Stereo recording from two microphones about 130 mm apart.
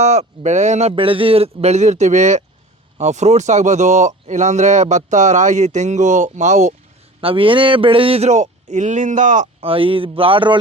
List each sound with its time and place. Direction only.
0.0 s speech: 60° right (ahead or behind)
7.2 s speech: 45° right (ahead or behind); by 9.5 s 75° right (ahead or behind)
9.6 s a man's voice: 45° right (ahead or behind)